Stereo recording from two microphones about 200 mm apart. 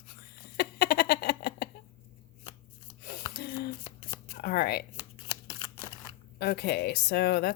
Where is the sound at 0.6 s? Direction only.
50° left (ahead or behind).